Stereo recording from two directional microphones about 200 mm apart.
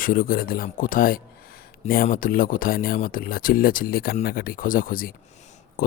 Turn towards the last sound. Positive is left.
turn(degrees=45)  # may be behind; listen again after turning